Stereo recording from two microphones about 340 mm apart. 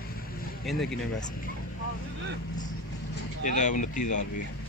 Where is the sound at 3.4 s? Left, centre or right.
Left.